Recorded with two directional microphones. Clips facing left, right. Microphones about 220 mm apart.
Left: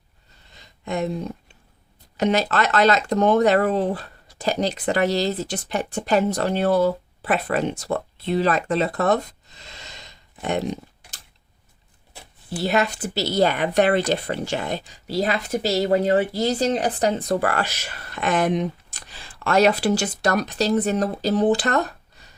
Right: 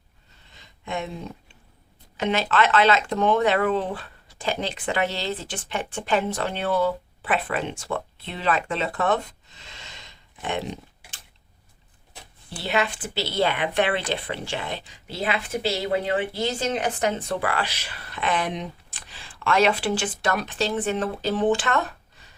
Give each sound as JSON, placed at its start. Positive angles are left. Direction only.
{"t": 0.6, "sound": "speech", "side_deg": 40}
{"t": 12.5, "sound": "speech", "side_deg": 40}